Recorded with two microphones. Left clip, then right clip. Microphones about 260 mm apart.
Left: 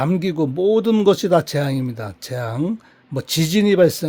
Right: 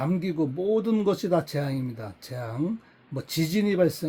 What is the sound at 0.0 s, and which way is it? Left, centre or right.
Speech, left.